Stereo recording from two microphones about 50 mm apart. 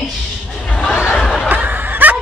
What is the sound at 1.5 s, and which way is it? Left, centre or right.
Snicker, right.